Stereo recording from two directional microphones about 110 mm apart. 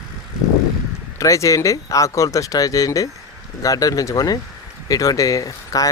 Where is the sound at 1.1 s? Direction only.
30° left (ahead or behind).